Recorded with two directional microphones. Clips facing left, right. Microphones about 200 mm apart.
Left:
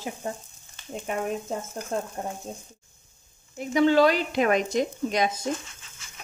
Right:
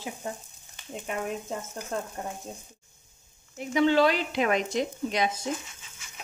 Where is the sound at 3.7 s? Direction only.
45° left (ahead or behind).